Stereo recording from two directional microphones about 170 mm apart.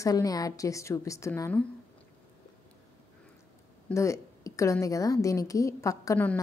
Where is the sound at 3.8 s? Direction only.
15° left (ahead or behind).